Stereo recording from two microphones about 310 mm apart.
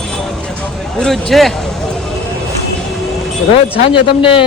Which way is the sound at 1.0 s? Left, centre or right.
Centre.